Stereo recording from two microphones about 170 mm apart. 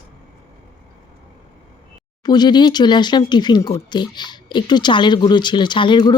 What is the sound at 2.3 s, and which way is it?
Speech, 25° left (ahead or behind).